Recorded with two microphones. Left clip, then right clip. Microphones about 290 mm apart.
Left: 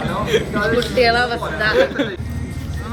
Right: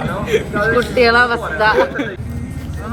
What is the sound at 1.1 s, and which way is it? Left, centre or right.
Speech, centre.